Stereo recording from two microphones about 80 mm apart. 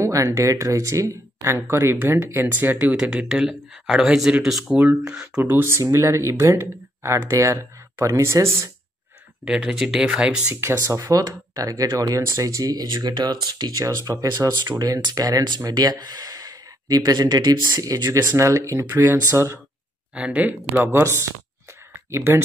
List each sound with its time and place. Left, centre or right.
0.0 s speech: right
2.8 s speech: centre
4.7 s speech: centre
5.4 s speech: right
9.4 s speech: centre
10.5 s speech: right
12.7 s speech: right
13.8 s speech: right
20.2 s speech: centre
20.9 s speech: right
21.9 s a sound: right